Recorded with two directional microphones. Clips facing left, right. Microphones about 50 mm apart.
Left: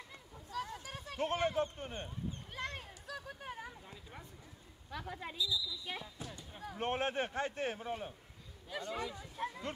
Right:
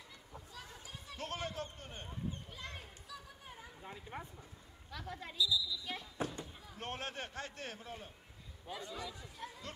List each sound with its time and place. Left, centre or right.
0.5 s a sound: left
1.1 s a man's voice: left
2.5 s children playing: left
3.8 s speech: right
4.9 s speech: centre
6.1 s speech: right
6.8 s a man's voice: left
8.7 s speech: left